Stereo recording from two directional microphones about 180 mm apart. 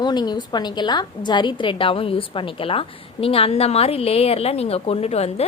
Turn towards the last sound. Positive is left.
turn(degrees=35)  # may be behind; listen again after turning